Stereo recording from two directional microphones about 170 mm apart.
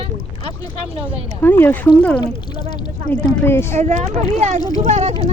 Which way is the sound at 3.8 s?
40° right (ahead or behind).